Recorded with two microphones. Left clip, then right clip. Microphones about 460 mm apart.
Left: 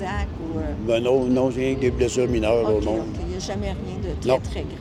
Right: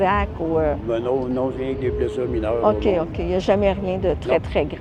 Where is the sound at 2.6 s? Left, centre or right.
Right.